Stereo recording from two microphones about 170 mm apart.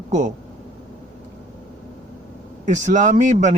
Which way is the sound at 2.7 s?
45° right (ahead or behind).